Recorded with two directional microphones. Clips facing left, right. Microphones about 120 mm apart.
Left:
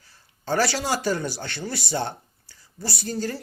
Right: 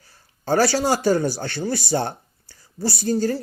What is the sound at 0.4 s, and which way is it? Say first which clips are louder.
Speech: right 5 dB; 40° right (ahead or behind).